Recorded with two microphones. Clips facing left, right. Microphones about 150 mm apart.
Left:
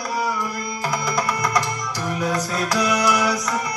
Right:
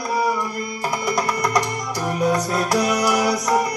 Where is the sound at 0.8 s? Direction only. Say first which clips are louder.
Right 1 dB; 35° right (ahead or behind).